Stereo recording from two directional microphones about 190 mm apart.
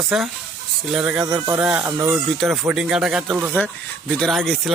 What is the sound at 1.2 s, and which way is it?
Speech, 20° right (ahead or behind).